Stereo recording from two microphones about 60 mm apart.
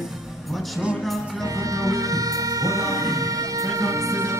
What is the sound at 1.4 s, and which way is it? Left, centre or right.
Music, right.